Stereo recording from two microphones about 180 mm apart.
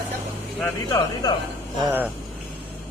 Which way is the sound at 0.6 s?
20° left (ahead or behind).